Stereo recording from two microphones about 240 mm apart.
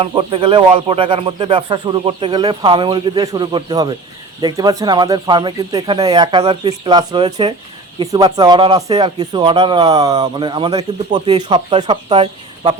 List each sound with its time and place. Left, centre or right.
0.0 s speech: right